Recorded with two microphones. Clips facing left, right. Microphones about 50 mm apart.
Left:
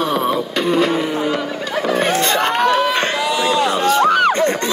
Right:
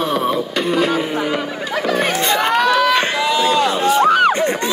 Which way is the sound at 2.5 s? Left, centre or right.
Right.